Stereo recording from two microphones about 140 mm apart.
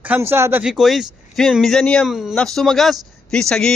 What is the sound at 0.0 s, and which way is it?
Speech, 15° right (ahead or behind).